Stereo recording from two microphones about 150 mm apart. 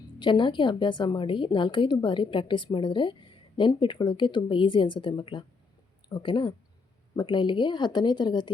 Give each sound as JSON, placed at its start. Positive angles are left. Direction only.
{"t": 0.2, "sound": "a woman's voice", "side_deg": 30}